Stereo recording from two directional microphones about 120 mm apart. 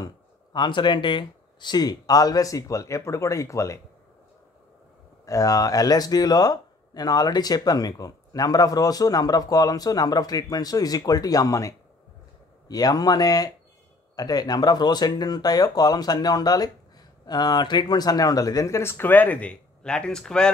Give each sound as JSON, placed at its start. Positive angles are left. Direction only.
{"t": 0.0, "sound": "speech", "side_deg": 40}
{"t": 5.2, "sound": "speech", "side_deg": 30}